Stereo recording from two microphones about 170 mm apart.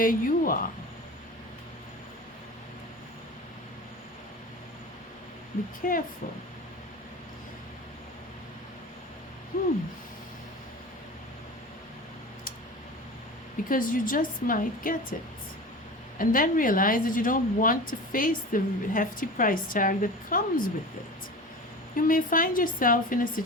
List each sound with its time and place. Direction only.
0.0 s a woman's voice: 55° left (ahead or behind)
5.8 s a woman's voice: 55° left (ahead or behind)
9.5 s a sound: 55° left (ahead or behind)
13.7 s a woman's voice: 55° left (ahead or behind)
16.1 s speech: 55° left (ahead or behind)
21.9 s speech: 55° left (ahead or behind)